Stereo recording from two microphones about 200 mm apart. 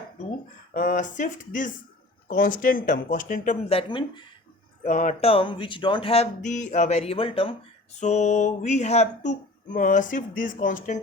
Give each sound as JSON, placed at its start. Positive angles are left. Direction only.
{"t": 0.7, "sound": "speech", "side_deg": 40}
{"t": 4.8, "sound": "speech", "side_deg": 35}